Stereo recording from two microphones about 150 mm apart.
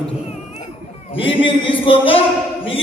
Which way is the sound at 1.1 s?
35° left (ahead or behind).